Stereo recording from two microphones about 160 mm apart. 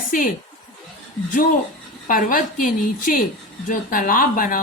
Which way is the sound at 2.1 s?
55° left (ahead or behind).